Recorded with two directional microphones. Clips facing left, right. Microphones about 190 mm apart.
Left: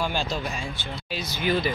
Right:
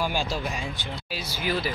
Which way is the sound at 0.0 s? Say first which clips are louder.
Even; 10° right (ahead or behind).